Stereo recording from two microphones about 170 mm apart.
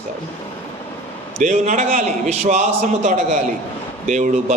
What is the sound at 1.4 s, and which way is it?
A man's voice, 45° right (ahead or behind).